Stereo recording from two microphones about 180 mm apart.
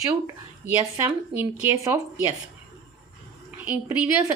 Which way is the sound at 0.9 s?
15° right (ahead or behind).